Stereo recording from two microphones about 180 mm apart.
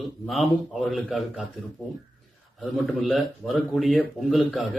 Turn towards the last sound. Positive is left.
turn(degrees=0)  # may be behind; listen again after turning